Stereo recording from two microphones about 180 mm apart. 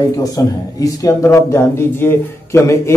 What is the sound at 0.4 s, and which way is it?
Speech, 20° left (ahead or behind).